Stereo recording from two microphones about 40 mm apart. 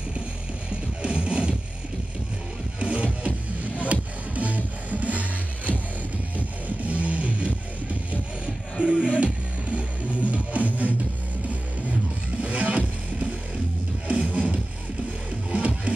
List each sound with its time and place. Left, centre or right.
0.7 s music: right
2.8 s music: right
6.3 s music: right